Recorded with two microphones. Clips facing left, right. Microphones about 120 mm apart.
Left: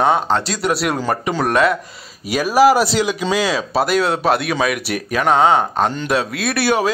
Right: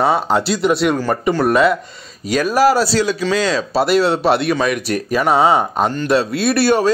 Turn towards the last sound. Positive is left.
turn(degrees=5)  # may be behind; listen again after turning